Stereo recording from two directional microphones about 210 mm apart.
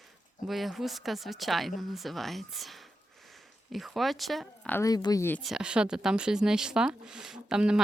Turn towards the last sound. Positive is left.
turn(degrees=-5)  # may be behind; listen again after turning